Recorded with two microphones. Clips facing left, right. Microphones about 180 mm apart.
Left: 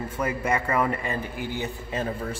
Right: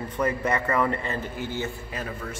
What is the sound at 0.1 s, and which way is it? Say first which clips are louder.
A man's voice: right 2 dB; 10° left (ahead or behind).